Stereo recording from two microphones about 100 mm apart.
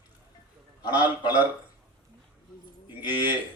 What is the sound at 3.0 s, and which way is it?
Speech, 45° left (ahead or behind).